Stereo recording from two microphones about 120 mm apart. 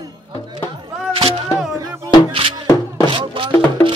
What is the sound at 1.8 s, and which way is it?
Music, 35° right (ahead or behind).